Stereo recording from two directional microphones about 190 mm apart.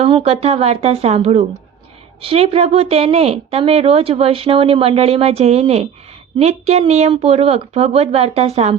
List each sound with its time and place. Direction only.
0.0 s a woman's voice: 30° right (ahead or behind)